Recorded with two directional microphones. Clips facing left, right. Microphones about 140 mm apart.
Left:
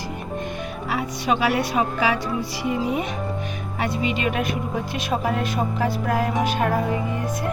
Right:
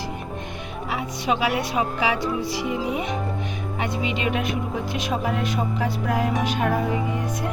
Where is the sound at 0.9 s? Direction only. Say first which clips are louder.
Left 1 dB; 15° right (ahead or behind).